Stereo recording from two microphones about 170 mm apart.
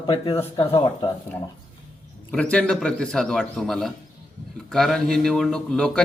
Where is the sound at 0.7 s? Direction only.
25° left (ahead or behind).